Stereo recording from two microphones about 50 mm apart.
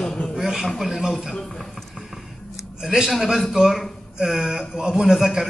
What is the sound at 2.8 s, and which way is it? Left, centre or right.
Speech, centre.